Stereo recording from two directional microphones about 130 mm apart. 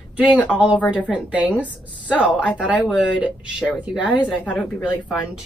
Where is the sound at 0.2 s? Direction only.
10° right (ahead or behind).